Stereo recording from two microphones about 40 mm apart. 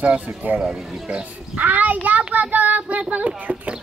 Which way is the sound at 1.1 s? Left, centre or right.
Right.